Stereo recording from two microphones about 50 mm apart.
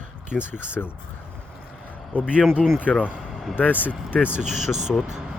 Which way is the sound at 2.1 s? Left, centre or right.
Right.